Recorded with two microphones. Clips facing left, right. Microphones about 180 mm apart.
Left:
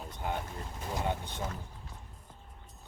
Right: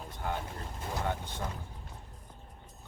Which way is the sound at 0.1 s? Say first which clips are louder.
Even; 20° left (ahead or behind).